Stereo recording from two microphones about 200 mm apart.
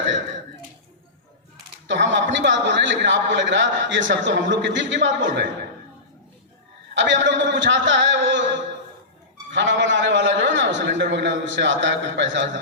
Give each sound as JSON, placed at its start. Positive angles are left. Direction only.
{"t": 1.9, "sound": "a man's voice", "side_deg": -65}
{"t": 6.9, "sound": "a man's voice", "side_deg": -65}
{"t": 9.5, "sound": "a man's voice", "side_deg": -65}